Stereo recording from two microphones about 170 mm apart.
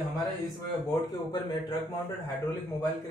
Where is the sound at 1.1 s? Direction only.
20° left (ahead or behind).